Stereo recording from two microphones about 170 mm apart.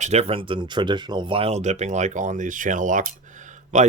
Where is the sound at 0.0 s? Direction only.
40° right (ahead or behind).